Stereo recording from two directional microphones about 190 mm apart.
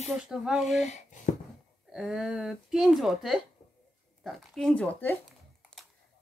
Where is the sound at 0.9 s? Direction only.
40° left (ahead or behind).